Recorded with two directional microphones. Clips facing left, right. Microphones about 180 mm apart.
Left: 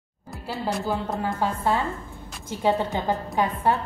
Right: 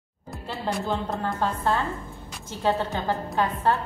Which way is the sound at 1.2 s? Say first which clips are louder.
Left 2 dB; 10° left (ahead or behind).